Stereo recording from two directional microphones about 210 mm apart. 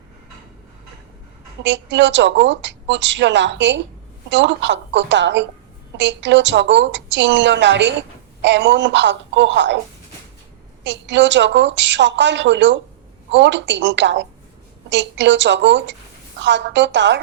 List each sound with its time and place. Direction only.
1.6 s a woman's voice: 60° right (ahead or behind)
10.8 s a woman's voice: 60° right (ahead or behind)